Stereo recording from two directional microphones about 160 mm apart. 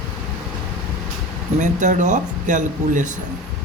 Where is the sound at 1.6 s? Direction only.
50° right (ahead or behind).